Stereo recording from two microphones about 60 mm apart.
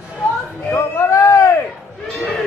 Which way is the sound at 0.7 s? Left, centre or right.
Left.